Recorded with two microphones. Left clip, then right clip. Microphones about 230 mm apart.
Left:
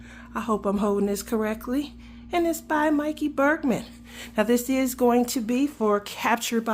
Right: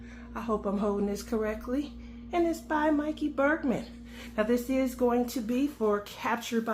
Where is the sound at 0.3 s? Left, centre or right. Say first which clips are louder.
Left 5 dB; left.